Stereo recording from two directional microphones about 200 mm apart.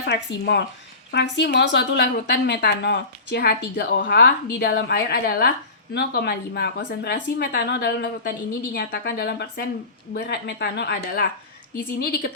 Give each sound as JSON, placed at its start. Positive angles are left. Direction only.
{"t": 0.0, "sound": "a woman's voice", "side_deg": 60}